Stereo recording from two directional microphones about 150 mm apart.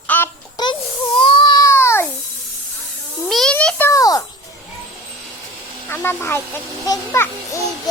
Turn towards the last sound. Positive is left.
turn(degrees=20)  # may be behind; listen again after turning